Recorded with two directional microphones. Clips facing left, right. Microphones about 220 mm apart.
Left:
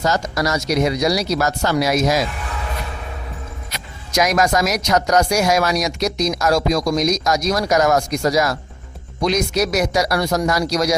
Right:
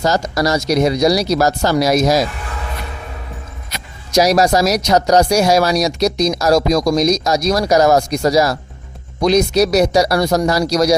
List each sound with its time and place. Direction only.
0.0 s speech: 35° right (ahead or behind)
4.1 s speech: 35° right (ahead or behind)